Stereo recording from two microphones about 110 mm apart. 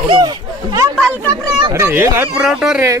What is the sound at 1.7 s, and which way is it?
Speech, 25° right (ahead or behind).